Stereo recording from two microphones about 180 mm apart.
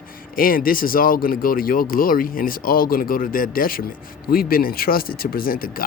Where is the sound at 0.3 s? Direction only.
50° left (ahead or behind).